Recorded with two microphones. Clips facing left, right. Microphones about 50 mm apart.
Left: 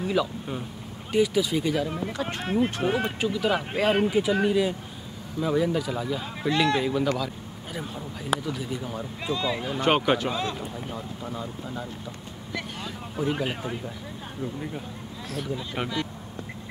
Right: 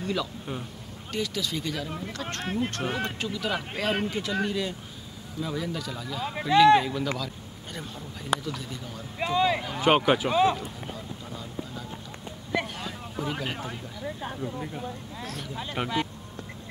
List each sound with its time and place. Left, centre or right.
0.0 s speech: centre
9.2 s speech: right
9.6 s speech: centre
11.2 s speech: centre
12.8 s speech: centre